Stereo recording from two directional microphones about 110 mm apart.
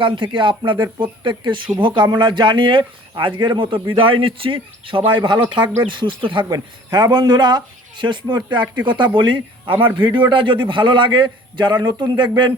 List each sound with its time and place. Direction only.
0.0 s speech: 50° right (ahead or behind)